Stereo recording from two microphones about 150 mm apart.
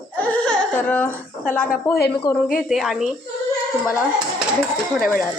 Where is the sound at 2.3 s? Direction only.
25° left (ahead or behind).